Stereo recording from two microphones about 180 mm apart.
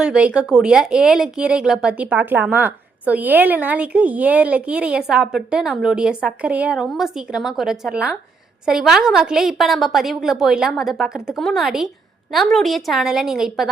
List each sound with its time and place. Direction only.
0.0 s speech: 5° right (ahead or behind)